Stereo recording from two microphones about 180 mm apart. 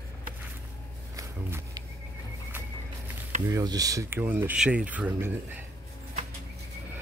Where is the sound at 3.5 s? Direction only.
20° right (ahead or behind).